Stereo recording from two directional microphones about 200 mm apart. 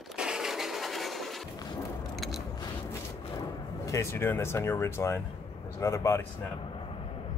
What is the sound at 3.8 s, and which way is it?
Speech, 15° left (ahead or behind).